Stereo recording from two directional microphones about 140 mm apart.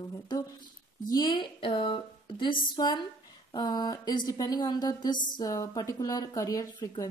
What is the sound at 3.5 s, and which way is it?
A woman's voice, 30° left (ahead or behind).